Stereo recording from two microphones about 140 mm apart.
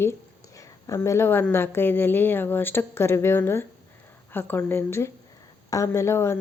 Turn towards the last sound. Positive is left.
turn(degrees=20)  # may be behind; listen again after turning